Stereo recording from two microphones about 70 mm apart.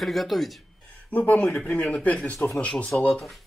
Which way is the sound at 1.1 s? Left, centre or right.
Left.